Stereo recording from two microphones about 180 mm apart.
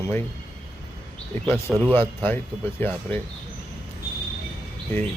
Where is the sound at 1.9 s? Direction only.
10° left (ahead or behind).